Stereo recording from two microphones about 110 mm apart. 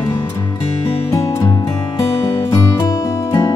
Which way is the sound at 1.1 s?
30° left (ahead or behind).